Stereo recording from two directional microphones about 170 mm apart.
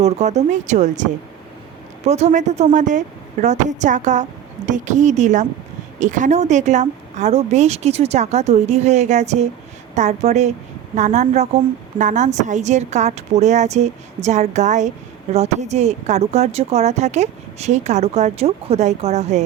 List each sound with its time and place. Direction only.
0.0 s a woman's voice: 40° right (ahead or behind)